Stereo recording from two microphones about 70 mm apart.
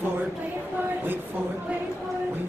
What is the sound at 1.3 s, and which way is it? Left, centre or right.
Speech, right.